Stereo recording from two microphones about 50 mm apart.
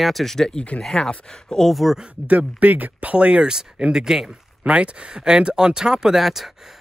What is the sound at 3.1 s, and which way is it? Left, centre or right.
Speech, right.